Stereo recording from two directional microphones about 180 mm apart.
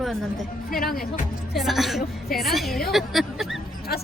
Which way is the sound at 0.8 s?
55° left (ahead or behind).